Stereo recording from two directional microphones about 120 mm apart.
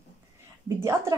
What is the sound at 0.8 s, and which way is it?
Speech, 25° right (ahead or behind).